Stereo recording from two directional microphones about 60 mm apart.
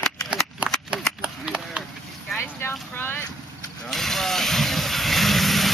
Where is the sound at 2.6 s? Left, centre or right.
Left.